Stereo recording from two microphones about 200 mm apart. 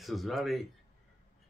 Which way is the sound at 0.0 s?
Centre (ahead or behind).